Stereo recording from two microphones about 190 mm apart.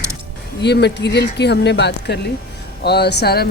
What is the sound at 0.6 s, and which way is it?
Speech, 60° left (ahead or behind).